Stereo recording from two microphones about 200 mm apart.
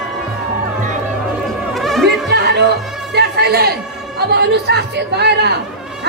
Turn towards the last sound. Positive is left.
turn(degrees=-55)  # may be behind; listen again after turning